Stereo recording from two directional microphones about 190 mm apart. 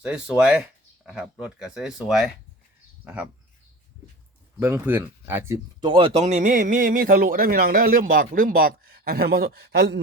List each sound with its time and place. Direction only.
0.0 s speech: 5° right (ahead or behind)
4.6 s speech: 10° right (ahead or behind)
5.8 s speech: 30° right (ahead or behind); by 10.0 s 60° right (ahead or behind)